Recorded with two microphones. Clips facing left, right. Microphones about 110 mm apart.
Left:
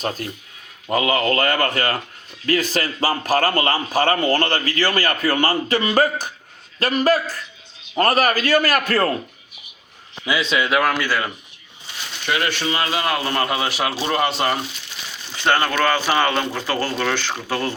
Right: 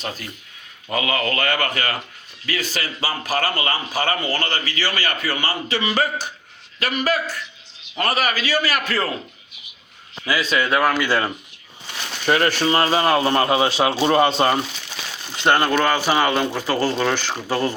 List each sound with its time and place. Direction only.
0.0 s speech: 40° left (ahead or behind)
0.9 s a man's voice: 30° left (ahead or behind); by 9.1 s 50° left (ahead or behind)
10.2 s a man's voice: 20° left (ahead or behind)
10.6 s speech: 10° left (ahead or behind)
11.0 s a man's voice: 25° right (ahead or behind)
12.2 s a man's voice: 40° right (ahead or behind); by 17.7 s 15° right (ahead or behind)